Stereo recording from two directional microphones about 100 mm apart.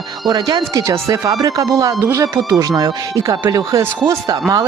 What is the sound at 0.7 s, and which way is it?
Speech, 30° right (ahead or behind).